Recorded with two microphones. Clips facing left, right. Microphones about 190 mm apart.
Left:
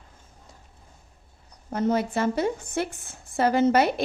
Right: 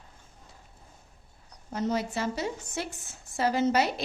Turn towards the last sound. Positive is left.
turn(degrees=55)  # may be behind; listen again after turning